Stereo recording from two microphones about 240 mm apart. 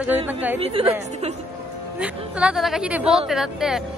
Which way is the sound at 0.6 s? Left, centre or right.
Right.